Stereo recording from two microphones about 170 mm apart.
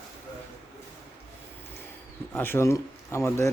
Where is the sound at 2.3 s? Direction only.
10° left (ahead or behind).